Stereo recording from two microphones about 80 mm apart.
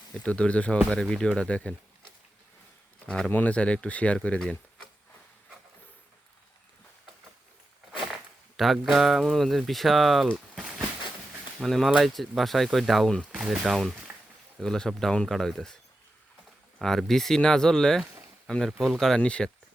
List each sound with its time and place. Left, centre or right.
0.2 s speech: centre
3.1 s speech: centre
8.5 s speech: centre
10.3 s a sound: centre
11.6 s speech: centre
13.3 s speech: centre
16.8 s speech: centre